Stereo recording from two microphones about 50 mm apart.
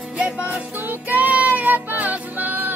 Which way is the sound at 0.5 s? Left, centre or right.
Right.